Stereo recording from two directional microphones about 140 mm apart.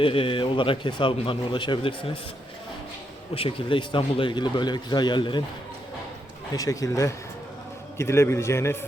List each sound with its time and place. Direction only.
0.0 s speech: 40° left (ahead or behind)
3.3 s speech: 40° left (ahead or behind)
6.5 s a man's voice: 25° left (ahead or behind)